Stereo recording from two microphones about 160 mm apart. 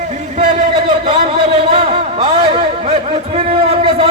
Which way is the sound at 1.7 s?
35° right (ahead or behind).